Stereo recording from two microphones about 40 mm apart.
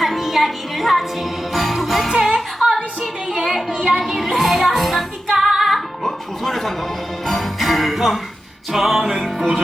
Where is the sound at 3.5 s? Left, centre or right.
Centre.